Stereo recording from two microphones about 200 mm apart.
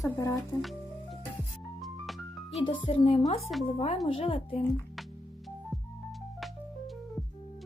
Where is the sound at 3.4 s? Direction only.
Centre (ahead or behind).